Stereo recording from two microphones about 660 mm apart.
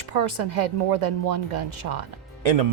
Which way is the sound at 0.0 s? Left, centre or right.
Right.